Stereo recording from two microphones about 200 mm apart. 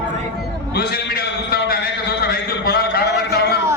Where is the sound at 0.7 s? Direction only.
50° left (ahead or behind).